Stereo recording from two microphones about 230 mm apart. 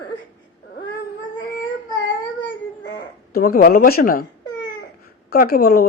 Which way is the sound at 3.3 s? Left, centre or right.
Left.